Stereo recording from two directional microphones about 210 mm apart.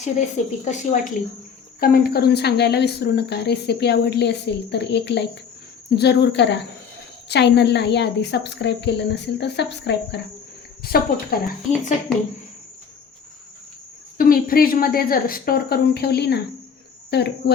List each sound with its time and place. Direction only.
0.6 s speech: 35° left (ahead or behind)
1.8 s speech: 45° left (ahead or behind)
14.2 s speech: 45° left (ahead or behind)